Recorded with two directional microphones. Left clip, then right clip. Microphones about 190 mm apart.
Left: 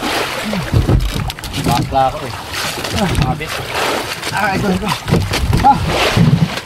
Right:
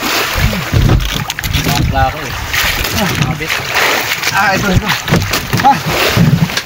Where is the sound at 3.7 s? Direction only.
40° left (ahead or behind).